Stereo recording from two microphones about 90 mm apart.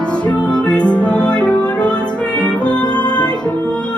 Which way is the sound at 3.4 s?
15° left (ahead or behind).